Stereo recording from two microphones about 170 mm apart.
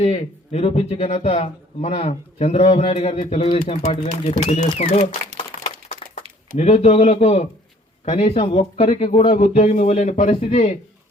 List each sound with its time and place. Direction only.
0.0 s speech: 35° left (ahead or behind)
5.3 s crumpling: 35° right (ahead or behind)
6.6 s speech: 40° left (ahead or behind)